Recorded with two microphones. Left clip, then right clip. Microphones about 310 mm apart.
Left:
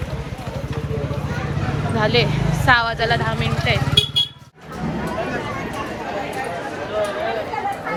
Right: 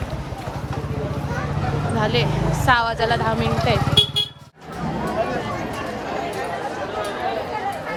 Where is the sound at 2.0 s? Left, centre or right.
Centre.